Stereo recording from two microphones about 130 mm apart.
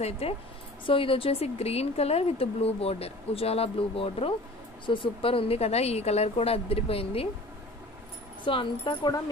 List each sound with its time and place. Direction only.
0.0 s a woman's voice: 50° left (ahead or behind)
8.5 s speech: 40° left (ahead or behind)